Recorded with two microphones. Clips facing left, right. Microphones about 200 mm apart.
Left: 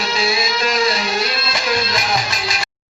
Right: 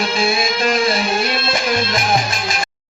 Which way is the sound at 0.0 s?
50° right (ahead or behind).